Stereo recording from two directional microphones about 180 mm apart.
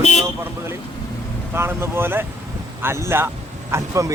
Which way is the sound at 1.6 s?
15° right (ahead or behind).